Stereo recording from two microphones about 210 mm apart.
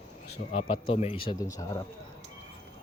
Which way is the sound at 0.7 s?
30° left (ahead or behind).